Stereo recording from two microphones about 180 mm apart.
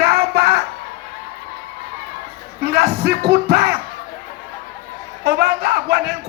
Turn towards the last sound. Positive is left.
turn(degrees=-65)  # may be behind; listen again after turning